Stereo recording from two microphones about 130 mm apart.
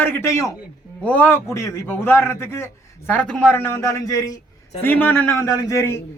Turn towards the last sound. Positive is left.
turn(degrees=20)  # may be behind; listen again after turning